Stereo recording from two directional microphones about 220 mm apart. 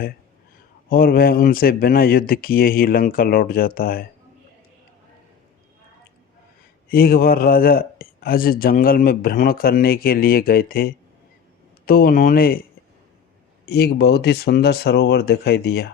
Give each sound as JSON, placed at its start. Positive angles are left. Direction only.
{"t": 0.9, "sound": "speech", "side_deg": 40}
{"t": 6.8, "sound": "speech", "side_deg": 45}
{"t": 13.7, "sound": "speech", "side_deg": 45}